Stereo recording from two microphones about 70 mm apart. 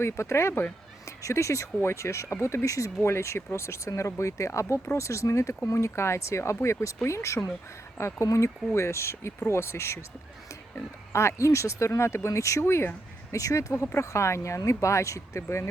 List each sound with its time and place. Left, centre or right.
0.0 s speech: left
11.1 s speech: left
13.3 s speech: left